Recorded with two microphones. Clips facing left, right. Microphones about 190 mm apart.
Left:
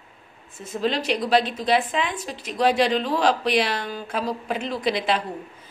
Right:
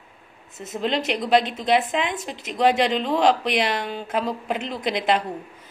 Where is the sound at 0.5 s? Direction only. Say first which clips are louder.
Even; 20° right (ahead or behind).